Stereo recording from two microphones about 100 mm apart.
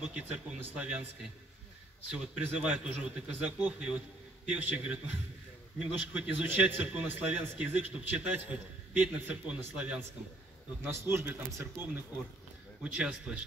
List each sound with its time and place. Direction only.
0.0 s a man's voice: 10° right (ahead or behind)
2.0 s a man's voice: 10° right (ahead or behind)
10.8 s speech: 25° right (ahead or behind)
12.8 s a man's voice: 10° right (ahead or behind)